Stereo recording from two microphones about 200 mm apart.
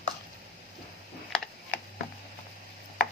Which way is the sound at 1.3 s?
Centre (ahead or behind).